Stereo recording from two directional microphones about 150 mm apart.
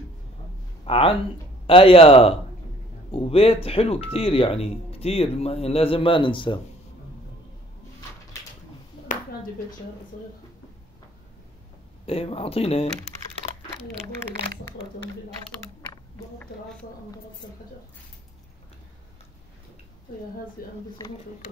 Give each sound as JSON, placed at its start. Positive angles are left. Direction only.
{"t": 0.8, "sound": "speech", "side_deg": 40}
{"t": 12.1, "sound": "speech", "side_deg": 40}
{"t": 14.3, "sound": "speech", "side_deg": -90}
{"t": 20.6, "sound": "speech", "side_deg": 75}